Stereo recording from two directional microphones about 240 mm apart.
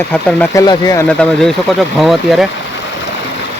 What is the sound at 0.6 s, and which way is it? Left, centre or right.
Speech, centre.